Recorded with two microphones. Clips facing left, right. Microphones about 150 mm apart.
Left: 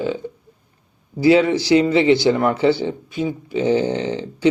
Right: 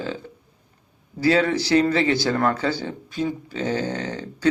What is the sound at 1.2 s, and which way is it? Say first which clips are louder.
A man's voice: left 5 dB; 20° left (ahead or behind).